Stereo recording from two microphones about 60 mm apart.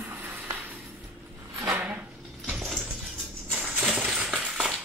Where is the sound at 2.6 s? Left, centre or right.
Centre.